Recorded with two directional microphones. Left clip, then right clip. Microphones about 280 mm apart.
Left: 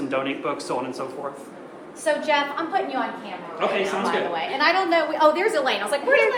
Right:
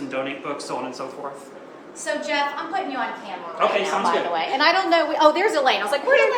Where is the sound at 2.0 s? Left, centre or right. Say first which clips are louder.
Left 2 dB; centre.